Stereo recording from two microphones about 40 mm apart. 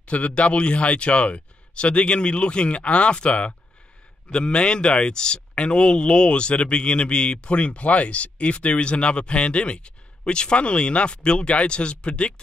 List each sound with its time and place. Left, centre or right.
0.0 s speech: left